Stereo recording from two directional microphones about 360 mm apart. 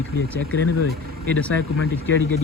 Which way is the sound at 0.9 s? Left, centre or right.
Right.